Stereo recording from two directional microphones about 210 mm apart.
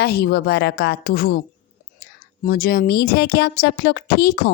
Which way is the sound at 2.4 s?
45° left (ahead or behind).